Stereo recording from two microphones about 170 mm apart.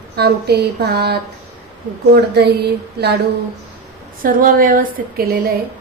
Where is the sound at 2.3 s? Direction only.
80° right.